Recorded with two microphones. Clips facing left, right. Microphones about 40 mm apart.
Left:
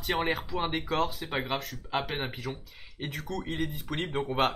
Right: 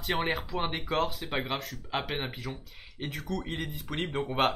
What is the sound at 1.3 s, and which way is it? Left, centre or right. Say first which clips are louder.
Speech: left 1 dB; centre.